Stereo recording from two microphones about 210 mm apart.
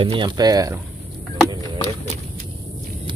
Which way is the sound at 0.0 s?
25° right (ahead or behind).